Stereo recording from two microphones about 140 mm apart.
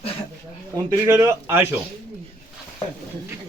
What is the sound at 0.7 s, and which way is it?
Speech, 20° right (ahead or behind).